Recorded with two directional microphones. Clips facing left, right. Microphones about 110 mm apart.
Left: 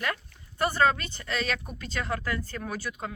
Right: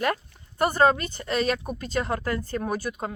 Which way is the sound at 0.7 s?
40° right (ahead or behind).